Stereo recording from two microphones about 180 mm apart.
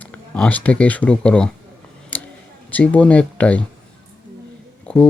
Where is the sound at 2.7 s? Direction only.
10° left (ahead or behind).